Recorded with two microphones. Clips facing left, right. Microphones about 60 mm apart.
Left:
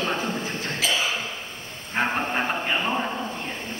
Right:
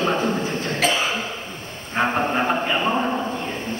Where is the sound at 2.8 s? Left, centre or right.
Centre.